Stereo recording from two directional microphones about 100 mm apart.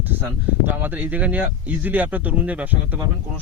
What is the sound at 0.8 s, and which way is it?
Speech, 20° right (ahead or behind).